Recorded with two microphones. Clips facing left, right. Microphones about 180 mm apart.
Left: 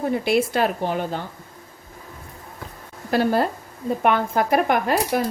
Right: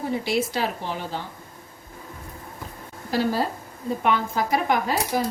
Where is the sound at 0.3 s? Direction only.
55° left (ahead or behind).